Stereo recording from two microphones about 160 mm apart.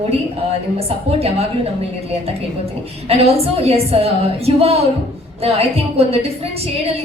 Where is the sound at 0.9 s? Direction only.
40° right (ahead or behind).